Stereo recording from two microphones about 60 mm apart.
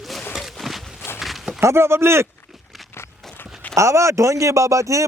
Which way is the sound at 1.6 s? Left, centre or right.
Right.